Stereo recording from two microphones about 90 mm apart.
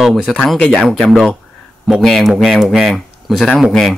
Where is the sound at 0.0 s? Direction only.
Centre (ahead or behind).